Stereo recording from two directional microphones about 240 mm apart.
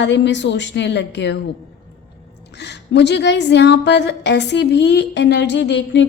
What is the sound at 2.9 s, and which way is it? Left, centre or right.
A woman's voice, left.